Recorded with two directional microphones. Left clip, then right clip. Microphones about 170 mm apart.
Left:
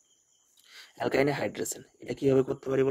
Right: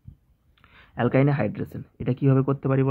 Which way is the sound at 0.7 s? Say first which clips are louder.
Right 4 dB; 35° left (ahead or behind).